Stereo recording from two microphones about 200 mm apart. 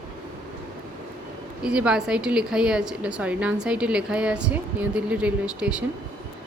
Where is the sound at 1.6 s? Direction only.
5° right (ahead or behind).